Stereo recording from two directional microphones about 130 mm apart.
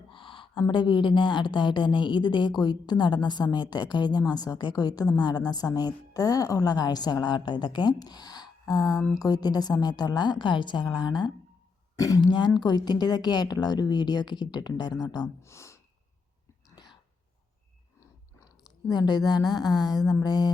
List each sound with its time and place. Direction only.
0.1 s a sound: 40° left (ahead or behind)
0.7 s a woman's voice: 40° left (ahead or behind); by 15.8 s 20° left (ahead or behind)
16.8 s whispering: 30° left (ahead or behind)
18.9 s a woman's voice: 30° left (ahead or behind)